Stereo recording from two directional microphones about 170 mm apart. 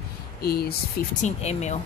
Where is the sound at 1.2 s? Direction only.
40° left (ahead or behind).